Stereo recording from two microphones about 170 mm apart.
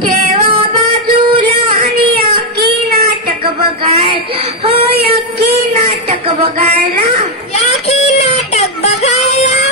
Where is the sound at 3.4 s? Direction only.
35° right (ahead or behind).